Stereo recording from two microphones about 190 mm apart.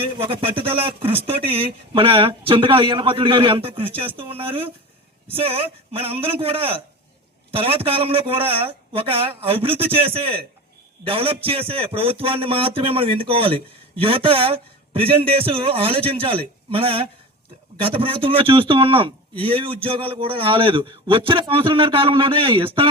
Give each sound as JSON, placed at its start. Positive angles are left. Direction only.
{"t": 0.0, "sound": "a man's voice", "side_deg": -25}